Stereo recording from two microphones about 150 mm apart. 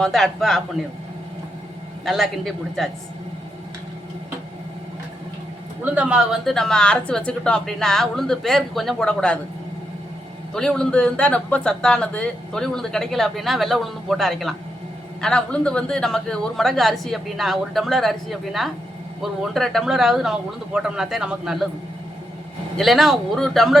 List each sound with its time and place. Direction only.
0.0 s speech: centre (ahead or behind)
2.0 s speech: centre (ahead or behind)
5.8 s speech: 10° right (ahead or behind); by 9.4 s 5° left (ahead or behind)
10.5 s speech: 5° left (ahead or behind)
22.8 s speech: centre (ahead or behind)